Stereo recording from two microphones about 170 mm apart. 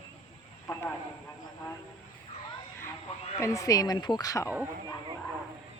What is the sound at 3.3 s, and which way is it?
Speech, 20° left (ahead or behind).